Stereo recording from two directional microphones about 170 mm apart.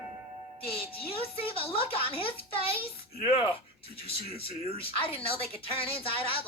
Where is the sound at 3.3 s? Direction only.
35° left (ahead or behind).